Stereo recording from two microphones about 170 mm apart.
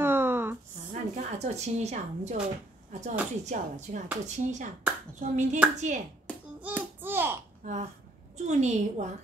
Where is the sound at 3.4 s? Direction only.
45° right (ahead or behind).